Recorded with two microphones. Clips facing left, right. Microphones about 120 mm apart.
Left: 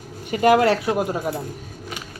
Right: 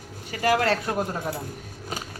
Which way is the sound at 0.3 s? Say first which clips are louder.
Left 6 dB; 20° left (ahead or behind).